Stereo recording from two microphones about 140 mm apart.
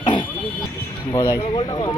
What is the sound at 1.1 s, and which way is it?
Speech, 30° left (ahead or behind).